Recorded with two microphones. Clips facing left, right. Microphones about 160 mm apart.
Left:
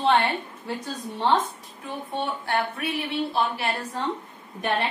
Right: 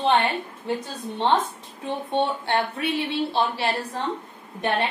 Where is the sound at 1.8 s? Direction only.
25° right (ahead or behind).